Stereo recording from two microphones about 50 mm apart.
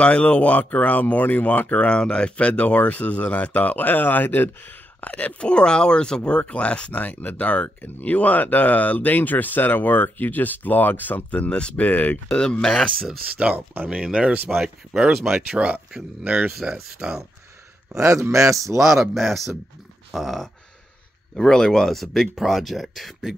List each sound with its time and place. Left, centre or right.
0.0 s speech: left
5.0 s speech: left
5.5 s speech: centre; by 12.2 s left
12.3 s speech: centre
13.4 s speech: right
16.6 s speech: centre
17.9 s a man's voice: right
18.8 s speech: centre
21.4 s speech: centre